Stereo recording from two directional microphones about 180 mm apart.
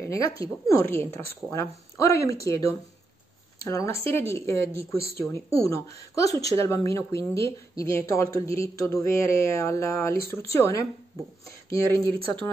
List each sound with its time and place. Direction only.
0.1 s a woman's voice: 20° left (ahead or behind)